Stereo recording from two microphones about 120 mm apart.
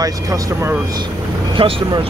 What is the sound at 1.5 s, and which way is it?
Speech, 45° right (ahead or behind).